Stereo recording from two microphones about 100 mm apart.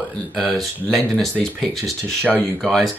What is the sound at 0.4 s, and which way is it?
Speech, centre (ahead or behind).